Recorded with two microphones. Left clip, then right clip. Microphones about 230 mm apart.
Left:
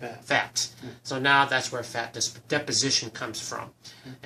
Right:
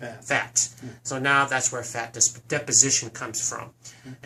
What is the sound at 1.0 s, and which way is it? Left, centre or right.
Speech, centre.